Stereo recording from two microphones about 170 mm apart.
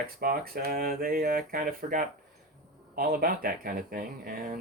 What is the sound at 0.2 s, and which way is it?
Speech, 60° right (ahead or behind).